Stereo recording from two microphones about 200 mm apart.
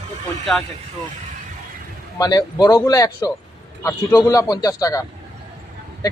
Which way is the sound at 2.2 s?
20° left (ahead or behind).